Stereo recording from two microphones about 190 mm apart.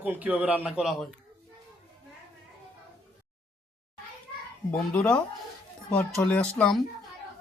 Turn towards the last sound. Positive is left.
turn(degrees=0)  # may be behind; listen again after turning